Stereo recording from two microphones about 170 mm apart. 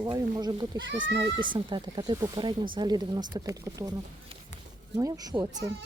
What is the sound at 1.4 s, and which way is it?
Speech, 30° right (ahead or behind).